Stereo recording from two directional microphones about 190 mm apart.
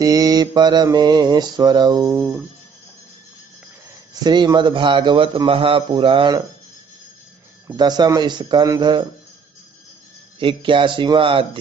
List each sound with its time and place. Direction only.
0.0 s mantra: 20° right (ahead or behind)
4.1 s mantra: 20° right (ahead or behind)
7.6 s mantra: 20° right (ahead or behind)
10.4 s mantra: 25° right (ahead or behind)